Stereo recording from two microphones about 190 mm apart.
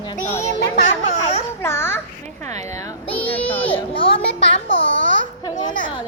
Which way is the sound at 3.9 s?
30° left (ahead or behind).